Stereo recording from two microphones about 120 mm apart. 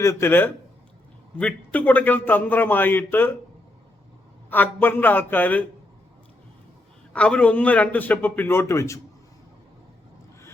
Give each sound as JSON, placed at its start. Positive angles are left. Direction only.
{"t": 0.0, "sound": "a man's voice", "side_deg": 25}
{"t": 4.4, "sound": "a man's voice", "side_deg": 15}
{"t": 7.1, "sound": "a man's voice", "side_deg": 10}